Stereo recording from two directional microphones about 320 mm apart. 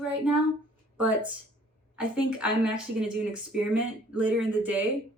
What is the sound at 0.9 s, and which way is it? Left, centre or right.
A woman's voice, centre.